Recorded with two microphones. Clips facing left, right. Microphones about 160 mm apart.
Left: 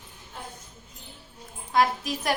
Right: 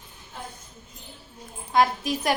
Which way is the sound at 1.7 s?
Centre (ahead or behind).